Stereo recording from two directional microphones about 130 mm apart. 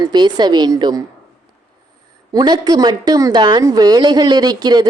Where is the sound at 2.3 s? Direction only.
30° right (ahead or behind).